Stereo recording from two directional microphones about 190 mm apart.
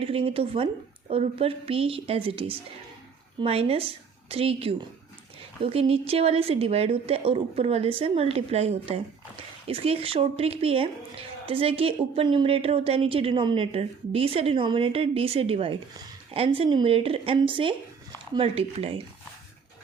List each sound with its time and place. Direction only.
0.0 s a woman's voice: 30° right (ahead or behind)